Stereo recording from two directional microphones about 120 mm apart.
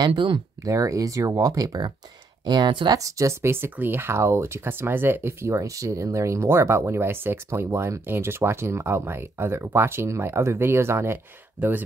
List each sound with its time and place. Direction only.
0.0 s speech: 40° right (ahead or behind)
0.7 s speech: 25° right (ahead or behind)